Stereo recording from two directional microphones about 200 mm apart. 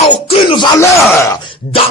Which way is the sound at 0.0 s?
25° left (ahead or behind).